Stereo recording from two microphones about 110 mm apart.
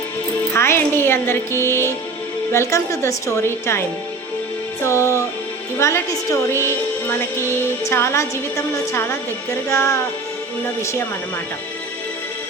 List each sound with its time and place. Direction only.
0.5 s speech: 25° left (ahead or behind)
4.8 s music: 25° left (ahead or behind)
5.8 s speech: 25° left (ahead or behind)
7.9 s speech: 25° left (ahead or behind)